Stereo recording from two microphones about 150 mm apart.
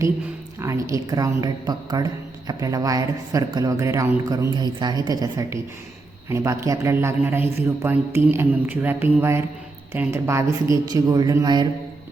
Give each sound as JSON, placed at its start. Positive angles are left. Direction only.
{"t": 0.9, "sound": "a woman's voice", "side_deg": -25}
{"t": 4.5, "sound": "a woman's voice", "side_deg": -30}